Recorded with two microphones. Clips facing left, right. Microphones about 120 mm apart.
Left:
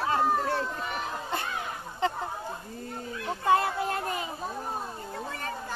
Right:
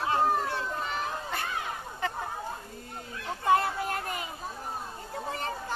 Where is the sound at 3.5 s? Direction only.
30° left (ahead or behind).